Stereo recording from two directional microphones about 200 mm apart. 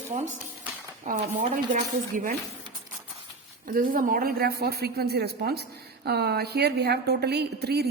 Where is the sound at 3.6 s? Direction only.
45° right (ahead or behind).